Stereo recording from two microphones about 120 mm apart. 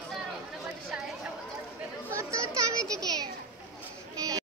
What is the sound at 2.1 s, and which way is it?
Chatter, 25° right (ahead or behind).